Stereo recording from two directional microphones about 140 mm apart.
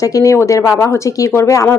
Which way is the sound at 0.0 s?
25° left (ahead or behind).